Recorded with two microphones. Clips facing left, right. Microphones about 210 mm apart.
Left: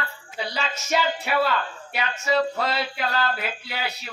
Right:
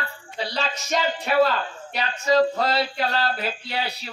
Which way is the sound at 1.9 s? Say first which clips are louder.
Right 3 dB; 35° right (ahead or behind).